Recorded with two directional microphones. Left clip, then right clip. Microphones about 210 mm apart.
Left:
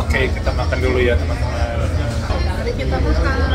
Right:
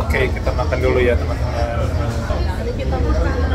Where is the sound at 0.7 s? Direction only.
10° left (ahead or behind).